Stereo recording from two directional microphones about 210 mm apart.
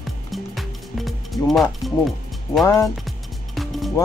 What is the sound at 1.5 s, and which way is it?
Speech, centre (ahead or behind).